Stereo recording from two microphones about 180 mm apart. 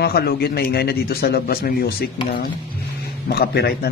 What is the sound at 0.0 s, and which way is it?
A man's voice, 60° left (ahead or behind).